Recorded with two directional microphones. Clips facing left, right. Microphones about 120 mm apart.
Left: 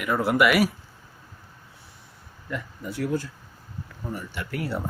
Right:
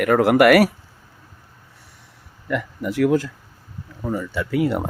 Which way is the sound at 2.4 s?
80° right.